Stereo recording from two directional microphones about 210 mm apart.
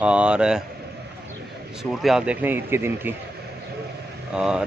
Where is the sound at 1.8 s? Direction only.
Centre (ahead or behind).